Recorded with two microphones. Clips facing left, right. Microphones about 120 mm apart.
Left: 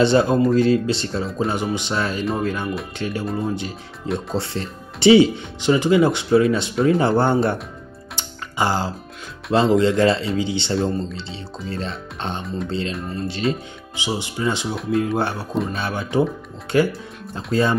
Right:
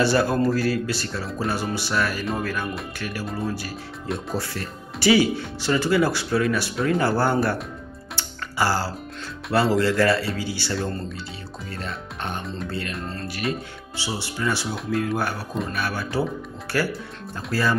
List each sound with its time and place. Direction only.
0.0 s speech: 20° left (ahead or behind)
8.2 s music: 20° left (ahead or behind)
9.5 s speech: 20° left (ahead or behind)